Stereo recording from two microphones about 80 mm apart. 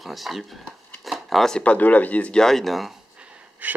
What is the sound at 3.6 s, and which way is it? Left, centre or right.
Wheeze, centre.